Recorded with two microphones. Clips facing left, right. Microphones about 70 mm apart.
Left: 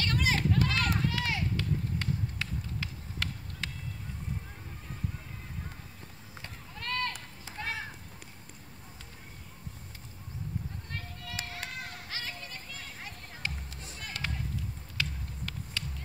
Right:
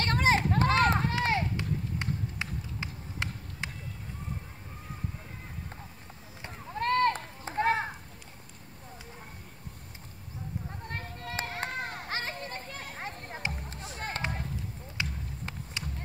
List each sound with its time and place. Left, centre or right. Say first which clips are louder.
0.0 s run: right 4 dB; right
1.6 s music: even; right
6.7 s run: right 10 dB; right
10.9 s children playing: right 6 dB; right
13.5 s music: right 5 dB; right
15.0 s a sound: even; right